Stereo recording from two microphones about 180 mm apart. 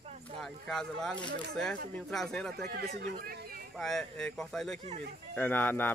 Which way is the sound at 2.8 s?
60° right (ahead or behind).